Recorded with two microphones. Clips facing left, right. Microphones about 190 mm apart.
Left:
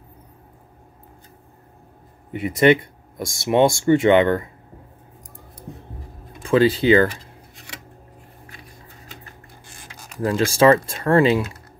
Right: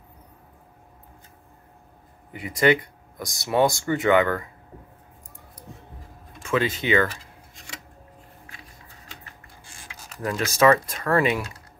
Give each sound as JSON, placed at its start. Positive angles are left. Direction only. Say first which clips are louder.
{"t": 2.3, "sound": "speech", "louder": "left 5 dB", "side_deg": 25}
{"t": 6.4, "sound": "speech", "louder": "left 8 dB", "side_deg": 35}
{"t": 10.2, "sound": "speech", "louder": "left 4 dB", "side_deg": 30}